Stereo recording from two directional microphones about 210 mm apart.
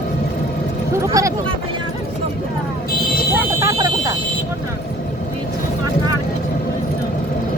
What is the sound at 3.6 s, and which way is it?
Fire alarm, 15° right (ahead or behind).